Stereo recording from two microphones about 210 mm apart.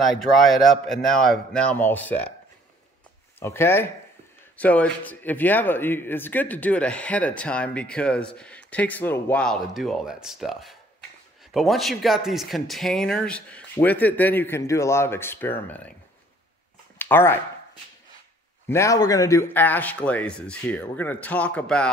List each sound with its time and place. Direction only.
0.5 s speech: centre (ahead or behind)
3.3 s speech: 10° left (ahead or behind)
17.0 s speech: 10° left (ahead or behind)
18.7 s speech: 15° left (ahead or behind)